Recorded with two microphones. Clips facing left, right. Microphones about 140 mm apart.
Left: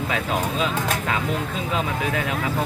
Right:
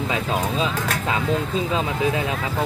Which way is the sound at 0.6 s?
25° right (ahead or behind).